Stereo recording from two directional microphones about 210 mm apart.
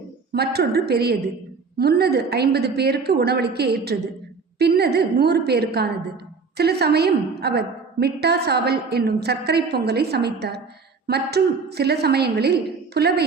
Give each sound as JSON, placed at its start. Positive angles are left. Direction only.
{"t": 0.3, "sound": "a woman's voice", "side_deg": -50}